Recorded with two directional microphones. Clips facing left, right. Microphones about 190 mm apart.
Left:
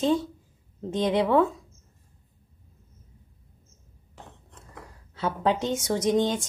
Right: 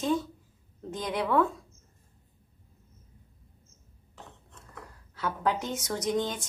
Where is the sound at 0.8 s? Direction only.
25° left (ahead or behind).